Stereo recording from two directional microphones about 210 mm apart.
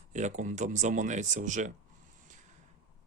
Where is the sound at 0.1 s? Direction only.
35° right (ahead or behind).